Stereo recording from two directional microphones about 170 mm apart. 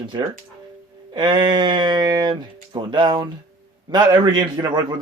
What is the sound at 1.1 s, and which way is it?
Speech, 25° right (ahead or behind).